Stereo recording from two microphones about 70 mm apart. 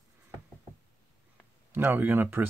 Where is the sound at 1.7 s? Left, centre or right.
Right.